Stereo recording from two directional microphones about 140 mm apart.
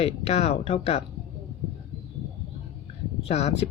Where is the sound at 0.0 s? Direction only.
50° left (ahead or behind).